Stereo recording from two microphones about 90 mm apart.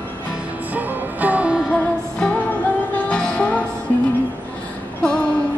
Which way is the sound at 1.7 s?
15° left (ahead or behind).